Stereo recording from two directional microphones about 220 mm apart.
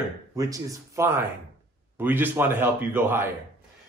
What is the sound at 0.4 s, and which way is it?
A man's voice, 15° right (ahead or behind).